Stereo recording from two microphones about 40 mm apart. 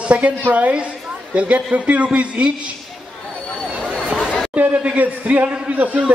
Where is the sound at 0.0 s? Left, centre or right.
Right.